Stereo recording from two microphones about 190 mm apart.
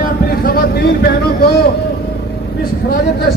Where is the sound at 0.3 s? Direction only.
50° left (ahead or behind).